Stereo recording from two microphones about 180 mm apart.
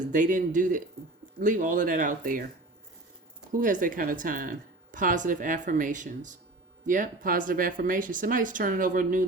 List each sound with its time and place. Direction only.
0.0 s speech: 45° right (ahead or behind)
3.5 s speech: 50° right (ahead or behind)